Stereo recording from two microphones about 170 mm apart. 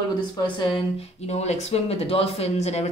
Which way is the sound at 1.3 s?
40° left (ahead or behind).